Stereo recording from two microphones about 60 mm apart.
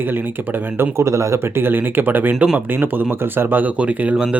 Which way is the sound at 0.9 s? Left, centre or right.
Right.